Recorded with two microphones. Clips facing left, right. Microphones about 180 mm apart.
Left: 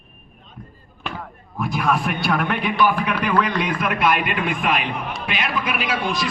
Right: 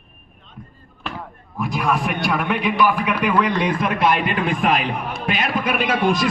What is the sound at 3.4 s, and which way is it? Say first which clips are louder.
A man's voice: right 2 dB; 25° right (ahead or behind).